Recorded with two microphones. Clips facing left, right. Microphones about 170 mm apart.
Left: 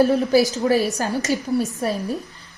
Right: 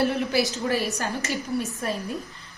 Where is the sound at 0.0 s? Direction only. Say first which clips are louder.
Left 7 dB; 40° left (ahead or behind).